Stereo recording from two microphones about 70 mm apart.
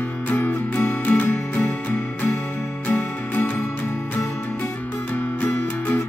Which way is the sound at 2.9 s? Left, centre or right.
Left.